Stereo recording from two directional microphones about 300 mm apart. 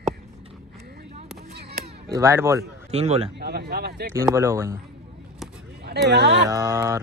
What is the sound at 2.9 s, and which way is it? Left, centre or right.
Speech, right.